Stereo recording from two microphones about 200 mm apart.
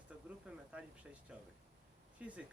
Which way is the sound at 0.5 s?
5° right (ahead or behind).